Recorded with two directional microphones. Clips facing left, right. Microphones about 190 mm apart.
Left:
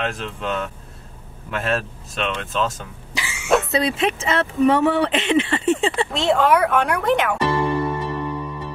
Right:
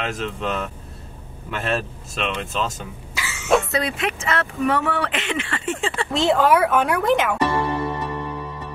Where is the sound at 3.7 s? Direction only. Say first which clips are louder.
Left 4 dB; 25° left (ahead or behind).